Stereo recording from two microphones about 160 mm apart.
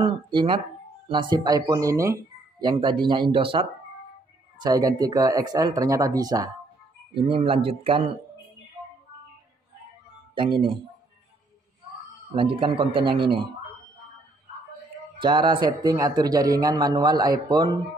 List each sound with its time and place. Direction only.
0.0 s a man's voice: 30° right (ahead or behind)
2.6 s a man's voice: 30° right (ahead or behind)
4.6 s a man's voice: 25° right (ahead or behind)
7.2 s a man's voice: 35° right (ahead or behind)
10.3 s a man's voice: 30° right (ahead or behind)
12.4 s a man's voice: 35° right (ahead or behind)
15.1 s a man's voice: 30° right (ahead or behind)